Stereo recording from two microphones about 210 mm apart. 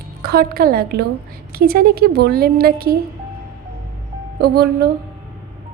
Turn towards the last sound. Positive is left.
turn(degrees=-50)  # may be behind; listen again after turning